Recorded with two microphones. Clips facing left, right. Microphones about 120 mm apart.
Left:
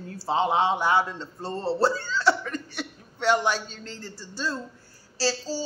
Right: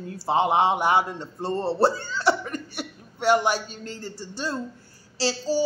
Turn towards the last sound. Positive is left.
turn(degrees=-20)  # may be behind; listen again after turning